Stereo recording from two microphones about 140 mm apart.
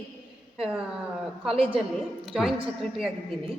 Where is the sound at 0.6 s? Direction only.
5° right (ahead or behind).